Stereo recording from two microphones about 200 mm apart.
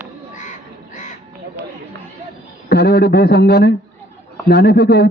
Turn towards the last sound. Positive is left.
turn(degrees=55)  # may be behind; listen again after turning